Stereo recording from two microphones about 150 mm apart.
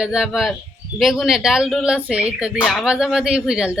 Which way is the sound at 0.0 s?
5° right (ahead or behind).